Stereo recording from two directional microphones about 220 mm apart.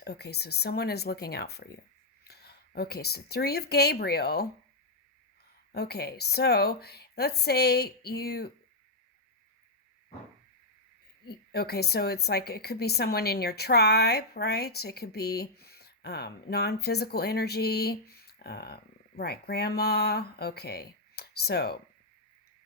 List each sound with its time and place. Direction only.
0.0 s a woman's voice: 50° left (ahead or behind)
5.7 s a woman's voice: 45° left (ahead or behind)
11.3 s a woman's voice: 45° left (ahead or behind)